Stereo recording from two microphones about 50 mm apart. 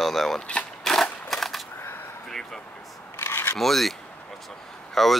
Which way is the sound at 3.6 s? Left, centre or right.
Centre.